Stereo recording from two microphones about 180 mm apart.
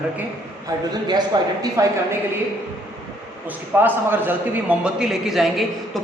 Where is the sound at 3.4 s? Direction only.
10° right (ahead or behind).